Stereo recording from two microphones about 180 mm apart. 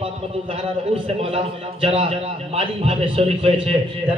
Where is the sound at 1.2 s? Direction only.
35° right (ahead or behind).